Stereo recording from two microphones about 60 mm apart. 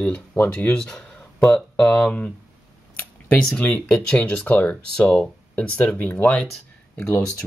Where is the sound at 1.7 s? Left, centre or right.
Centre.